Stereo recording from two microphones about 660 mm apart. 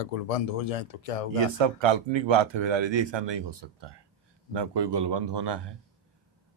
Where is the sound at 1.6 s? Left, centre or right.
Right.